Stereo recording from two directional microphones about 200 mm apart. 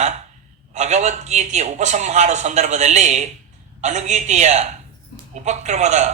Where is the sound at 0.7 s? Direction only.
35° right (ahead or behind).